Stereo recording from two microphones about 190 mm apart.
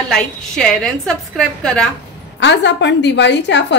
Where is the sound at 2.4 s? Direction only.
65° left (ahead or behind).